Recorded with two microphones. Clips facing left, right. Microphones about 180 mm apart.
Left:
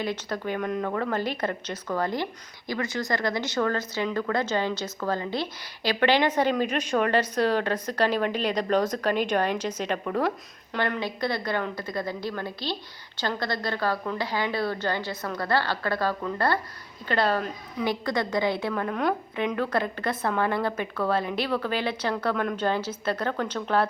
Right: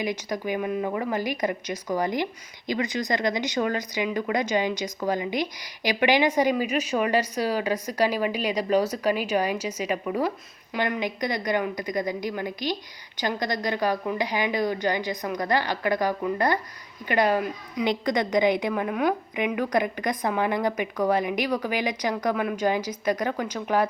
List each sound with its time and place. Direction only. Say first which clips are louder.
0.0 s a woman's voice: right 1 dB; 15° right (ahead or behind)